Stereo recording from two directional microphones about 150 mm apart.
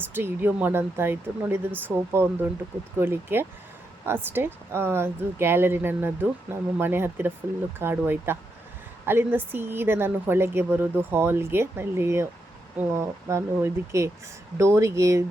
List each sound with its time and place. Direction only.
0.0 s speech: 15° right (ahead or behind)